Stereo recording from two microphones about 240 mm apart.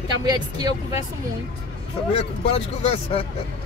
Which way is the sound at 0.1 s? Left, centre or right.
Centre.